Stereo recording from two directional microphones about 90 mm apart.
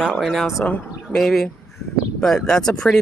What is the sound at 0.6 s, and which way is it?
Speech, 20° left (ahead or behind).